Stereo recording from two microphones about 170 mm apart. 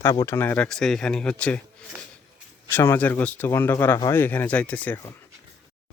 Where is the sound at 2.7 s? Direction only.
15° left (ahead or behind).